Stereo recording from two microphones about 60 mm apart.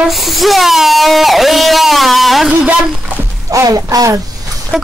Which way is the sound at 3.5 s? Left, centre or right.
Right.